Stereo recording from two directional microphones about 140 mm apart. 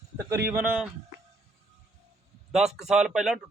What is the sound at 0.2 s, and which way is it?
Speech, 20° right (ahead or behind).